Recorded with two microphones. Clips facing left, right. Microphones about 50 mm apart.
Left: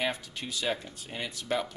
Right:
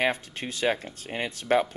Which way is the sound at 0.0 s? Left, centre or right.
Right.